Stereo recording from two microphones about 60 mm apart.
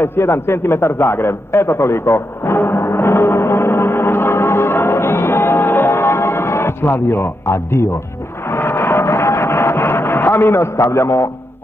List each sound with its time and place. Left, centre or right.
0.0 s radio: left
8.5 s music: left